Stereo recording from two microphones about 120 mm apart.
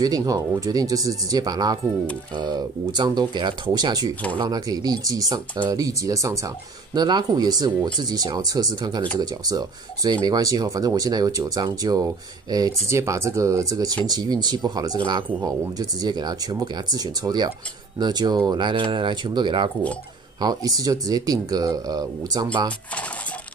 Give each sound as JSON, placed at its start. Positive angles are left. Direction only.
{"t": 0.0, "sound": "speech", "side_deg": -30}